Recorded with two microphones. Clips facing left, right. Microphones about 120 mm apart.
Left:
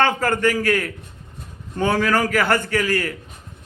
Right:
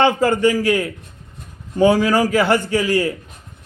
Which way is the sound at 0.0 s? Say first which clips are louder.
Right 4 dB; 15° right (ahead or behind).